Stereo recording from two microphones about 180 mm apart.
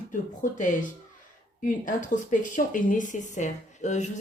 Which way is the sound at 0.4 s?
45° left (ahead or behind).